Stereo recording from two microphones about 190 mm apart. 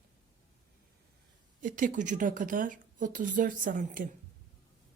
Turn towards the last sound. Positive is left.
turn(degrees=-45)  # may be behind; listen again after turning